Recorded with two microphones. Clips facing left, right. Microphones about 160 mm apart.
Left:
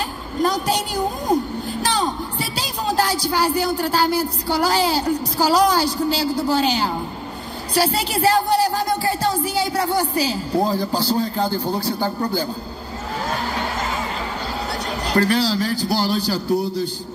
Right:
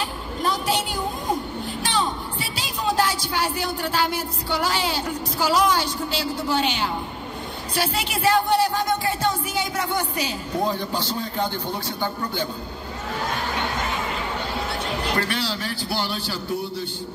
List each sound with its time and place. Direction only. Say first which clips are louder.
0.4 s a child's voice: left 4 dB; 40° left (ahead or behind)
14.9 s a child's voice: left 8 dB; 40° left (ahead or behind)